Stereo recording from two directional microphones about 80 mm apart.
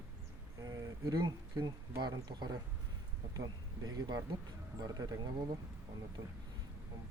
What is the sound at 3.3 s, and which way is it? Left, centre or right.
Speech, right.